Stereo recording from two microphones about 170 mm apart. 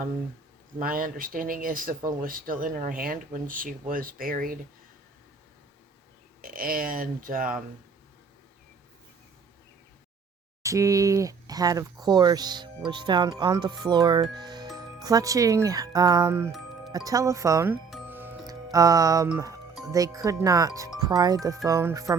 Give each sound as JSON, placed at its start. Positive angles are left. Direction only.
{"t": 0.8, "sound": "speech", "side_deg": -55}
{"t": 6.4, "sound": "speech", "side_deg": -55}
{"t": 10.6, "sound": "speech", "side_deg": -20}
{"t": 18.1, "sound": "music", "side_deg": -10}
{"t": 19.9, "sound": "speech", "side_deg": -20}